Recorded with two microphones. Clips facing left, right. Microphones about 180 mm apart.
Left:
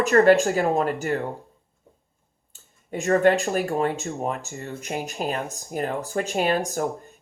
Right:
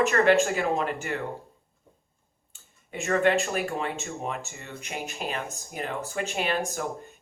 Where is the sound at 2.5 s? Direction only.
35° left (ahead or behind).